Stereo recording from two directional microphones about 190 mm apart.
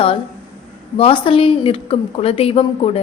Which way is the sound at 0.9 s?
30° left (ahead or behind).